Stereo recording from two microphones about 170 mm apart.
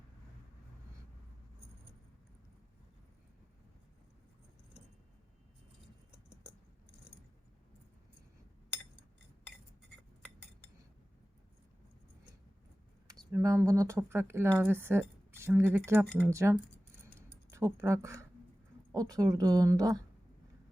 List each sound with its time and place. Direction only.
13.1 s speech: 20° right (ahead or behind)